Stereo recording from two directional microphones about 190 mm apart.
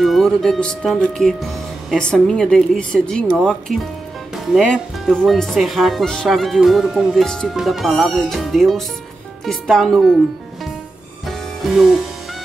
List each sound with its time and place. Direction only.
0.0 s speech: centre (ahead or behind)
11.2 s music: centre (ahead or behind)